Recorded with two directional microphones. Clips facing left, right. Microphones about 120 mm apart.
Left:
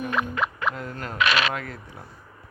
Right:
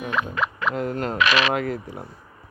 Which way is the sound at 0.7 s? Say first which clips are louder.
Right 7 dB; 25° right (ahead or behind).